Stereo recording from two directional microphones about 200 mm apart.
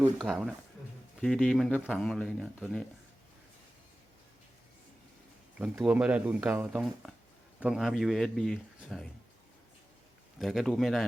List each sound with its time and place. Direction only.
0.2 s speech: centre (ahead or behind)
5.5 s speech: 5° right (ahead or behind)
10.3 s speech: centre (ahead or behind)